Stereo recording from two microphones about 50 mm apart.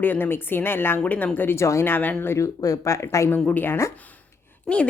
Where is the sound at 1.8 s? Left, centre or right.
Left.